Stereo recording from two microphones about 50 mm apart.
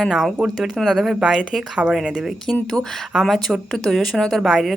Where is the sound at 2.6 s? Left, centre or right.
Centre.